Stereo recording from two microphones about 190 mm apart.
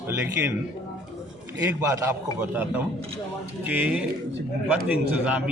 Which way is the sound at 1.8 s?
15° right (ahead or behind).